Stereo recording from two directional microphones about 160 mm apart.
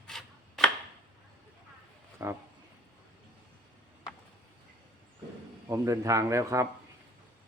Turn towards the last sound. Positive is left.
turn(degrees=-20)  # may be behind; listen again after turning